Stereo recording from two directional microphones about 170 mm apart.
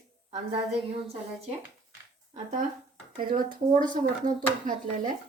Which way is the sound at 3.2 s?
55° right (ahead or behind).